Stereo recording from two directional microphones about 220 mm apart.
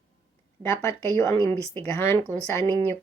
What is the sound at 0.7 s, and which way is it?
Speech, 10° left (ahead or behind).